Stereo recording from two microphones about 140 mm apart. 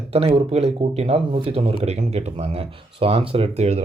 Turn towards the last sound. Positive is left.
turn(degrees=-50)  # may be behind; listen again after turning